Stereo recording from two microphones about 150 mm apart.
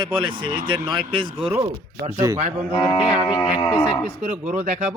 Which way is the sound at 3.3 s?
30° left (ahead or behind).